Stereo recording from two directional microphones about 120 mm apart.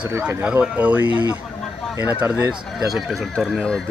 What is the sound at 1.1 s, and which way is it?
Speech, 30° left (ahead or behind).